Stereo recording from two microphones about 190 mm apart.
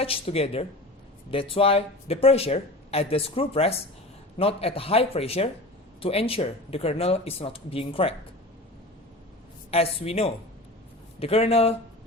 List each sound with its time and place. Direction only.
0.0 s speech: 30° left (ahead or behind)
9.7 s speech: 30° left (ahead or behind)